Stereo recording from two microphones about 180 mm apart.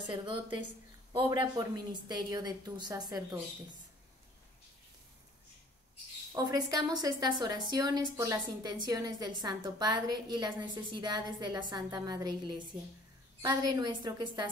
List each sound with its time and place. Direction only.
0.1 s a woman's voice: 25° right (ahead or behind)
6.3 s a woman's voice: 20° right (ahead or behind)